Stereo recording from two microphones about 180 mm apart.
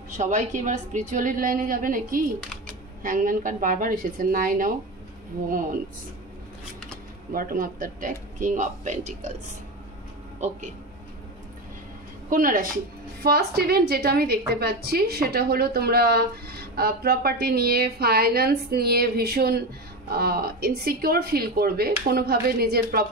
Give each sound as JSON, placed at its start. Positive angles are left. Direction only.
{"t": 0.2, "sound": "a woman's voice", "side_deg": -45}
{"t": 7.3, "sound": "a woman's voice", "side_deg": -50}
{"t": 12.3, "sound": "a woman's voice", "side_deg": -50}
{"t": 13.2, "sound": "a woman's voice", "side_deg": -60}